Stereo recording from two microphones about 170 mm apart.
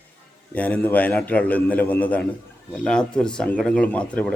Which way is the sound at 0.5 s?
10° left (ahead or behind).